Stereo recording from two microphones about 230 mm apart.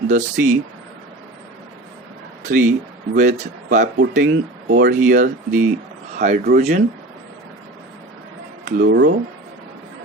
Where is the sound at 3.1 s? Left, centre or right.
Right.